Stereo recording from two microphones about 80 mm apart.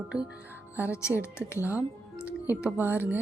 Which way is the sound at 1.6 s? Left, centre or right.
Right.